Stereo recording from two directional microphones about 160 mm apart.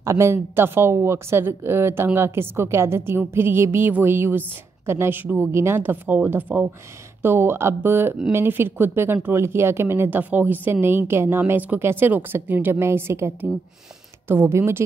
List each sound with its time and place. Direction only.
0.0 s speech: 20° right (ahead or behind)